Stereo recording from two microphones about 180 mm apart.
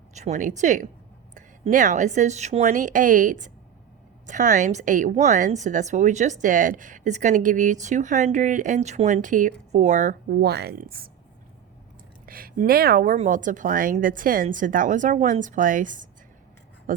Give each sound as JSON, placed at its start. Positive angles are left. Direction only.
{"t": 0.1, "sound": "a woman's voice", "side_deg": -40}
{"t": 10.2, "sound": "speech", "side_deg": -65}
{"t": 12.2, "sound": "a woman's voice", "side_deg": -55}